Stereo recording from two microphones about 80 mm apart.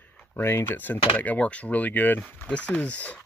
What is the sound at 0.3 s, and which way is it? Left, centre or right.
Speech, left.